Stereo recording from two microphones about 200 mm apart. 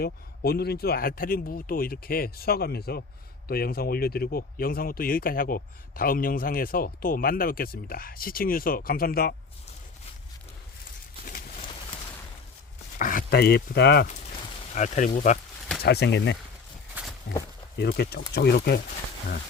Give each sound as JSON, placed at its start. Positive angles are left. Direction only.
{"t": 0.0, "sound": "speech", "side_deg": 50}
{"t": 11.3, "sound": "a sound", "side_deg": 45}
{"t": 13.0, "sound": "speech", "side_deg": 45}
{"t": 14.8, "sound": "speech", "side_deg": 40}
{"t": 15.8, "sound": "speech", "side_deg": 55}
{"t": 16.9, "sound": "walk", "side_deg": -5}
{"t": 17.7, "sound": "speech", "side_deg": 55}